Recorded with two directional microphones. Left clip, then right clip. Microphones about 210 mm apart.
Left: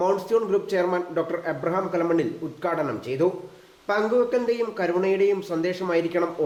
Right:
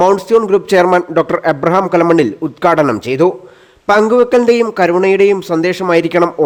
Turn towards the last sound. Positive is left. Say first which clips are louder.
# right 12 dB
turn(degrees=-55)  # may be behind; listen again after turning